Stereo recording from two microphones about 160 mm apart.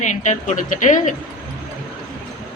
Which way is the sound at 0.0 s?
50° left (ahead or behind).